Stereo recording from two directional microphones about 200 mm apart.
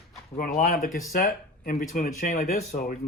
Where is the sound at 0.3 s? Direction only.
45° left (ahead or behind).